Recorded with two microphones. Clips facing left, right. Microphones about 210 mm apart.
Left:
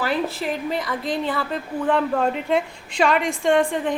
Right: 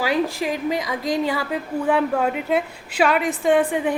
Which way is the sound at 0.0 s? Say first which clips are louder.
Right 2 dB; 15° right (ahead or behind).